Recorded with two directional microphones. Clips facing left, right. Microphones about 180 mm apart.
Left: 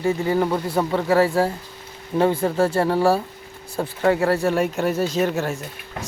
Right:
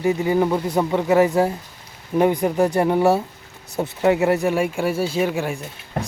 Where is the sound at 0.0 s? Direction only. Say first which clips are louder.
Right 2 dB; 15° right (ahead or behind).